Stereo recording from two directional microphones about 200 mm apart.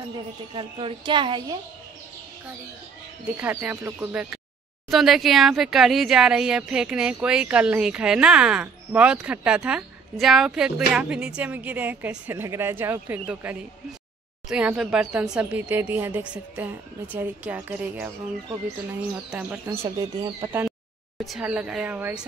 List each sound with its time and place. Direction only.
0.6 s a woman's voice: 25° right (ahead or behind)
3.3 s speech: 10° right (ahead or behind)
19.8 s a woman's voice: 20° right (ahead or behind)
21.2 s speech: centre (ahead or behind)